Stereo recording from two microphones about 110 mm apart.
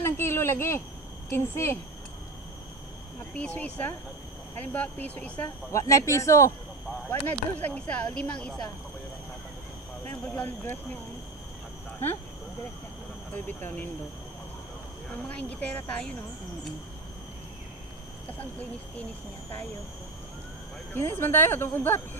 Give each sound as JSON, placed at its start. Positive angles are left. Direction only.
{"t": 0.0, "sound": "speech", "side_deg": 25}
{"t": 3.3, "sound": "speech", "side_deg": 15}
{"t": 5.7, "sound": "speech", "side_deg": 30}
{"t": 7.1, "sound": "speech", "side_deg": 15}
{"t": 10.2, "sound": "speech", "side_deg": 15}
{"t": 13.3, "sound": "speech", "side_deg": 15}
{"t": 15.0, "sound": "speech", "side_deg": 10}
{"t": 20.9, "sound": "speech", "side_deg": 20}